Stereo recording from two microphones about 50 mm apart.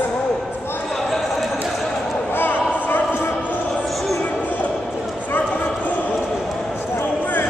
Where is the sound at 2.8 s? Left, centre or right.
Left.